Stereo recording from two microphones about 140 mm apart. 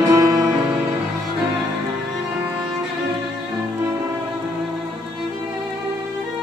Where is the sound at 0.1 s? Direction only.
20° right (ahead or behind).